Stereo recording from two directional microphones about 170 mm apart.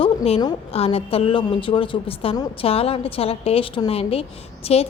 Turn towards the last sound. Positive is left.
turn(degrees=35)  # may be behind; listen again after turning